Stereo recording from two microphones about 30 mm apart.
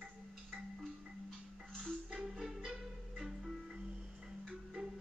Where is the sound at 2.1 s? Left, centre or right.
Right.